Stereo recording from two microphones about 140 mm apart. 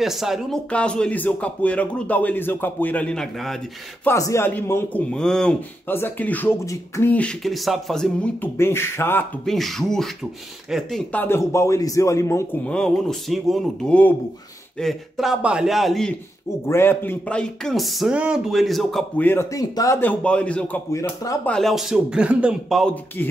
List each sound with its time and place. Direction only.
0.0 s speech: centre (ahead or behind)
4.0 s speech: 20° left (ahead or behind)
9.5 s speech: centre (ahead or behind); by 12.4 s 20° left (ahead or behind)
12.6 s speech: 5° left (ahead or behind)
16.6 s speech: 15° left (ahead or behind)
19.2 s speech: 20° left (ahead or behind)
20.0 s speech: 10° left (ahead or behind)